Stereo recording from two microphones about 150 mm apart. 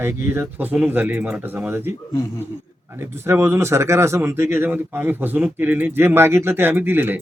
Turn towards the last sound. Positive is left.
turn(degrees=-15)  # may be behind; listen again after turning